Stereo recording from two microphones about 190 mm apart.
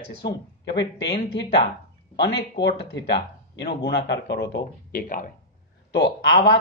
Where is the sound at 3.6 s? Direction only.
60° left (ahead or behind).